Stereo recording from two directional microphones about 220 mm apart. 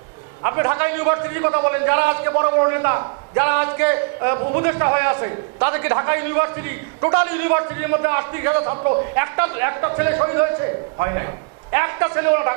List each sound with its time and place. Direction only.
0.4 s a man's voice: 15° right (ahead or behind)
8.6 s a man's voice: 25° right (ahead or behind)
9.1 s a man's voice: 15° right (ahead or behind)